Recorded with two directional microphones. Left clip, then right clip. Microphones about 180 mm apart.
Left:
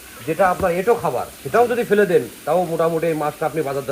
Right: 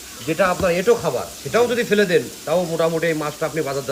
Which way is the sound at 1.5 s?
15° left (ahead or behind).